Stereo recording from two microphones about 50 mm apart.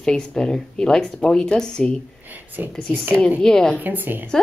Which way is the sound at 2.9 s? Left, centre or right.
Right.